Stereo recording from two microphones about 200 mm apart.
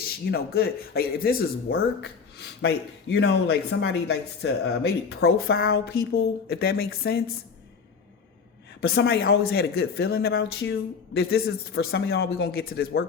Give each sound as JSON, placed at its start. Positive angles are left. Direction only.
{"t": 0.0, "sound": "speech", "side_deg": 50}
{"t": 3.7, "sound": "speech", "side_deg": 80}
{"t": 8.8, "sound": "speech", "side_deg": 50}